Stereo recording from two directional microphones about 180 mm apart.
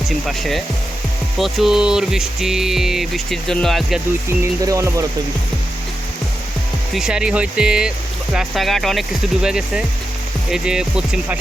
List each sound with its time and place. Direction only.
0.3 s speech: centre (ahead or behind)
4.6 s speech: 15° right (ahead or behind)
6.9 s speech: 5° right (ahead or behind)